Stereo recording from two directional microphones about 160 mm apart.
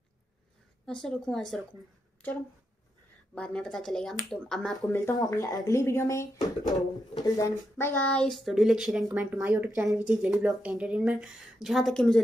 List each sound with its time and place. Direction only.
0.8 s a woman's voice: 5° left (ahead or behind)
3.3 s a woman's voice: 5° left (ahead or behind)
4.9 s a woman's voice: 20° left (ahead or behind); by 12.2 s 5° left (ahead or behind)